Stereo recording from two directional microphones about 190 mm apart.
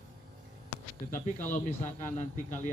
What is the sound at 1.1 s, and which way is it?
Speech, 40° left (ahead or behind).